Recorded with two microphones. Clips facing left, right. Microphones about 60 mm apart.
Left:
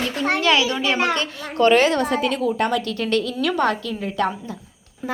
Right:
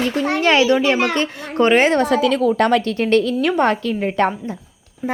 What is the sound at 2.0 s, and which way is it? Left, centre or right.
Speech, right.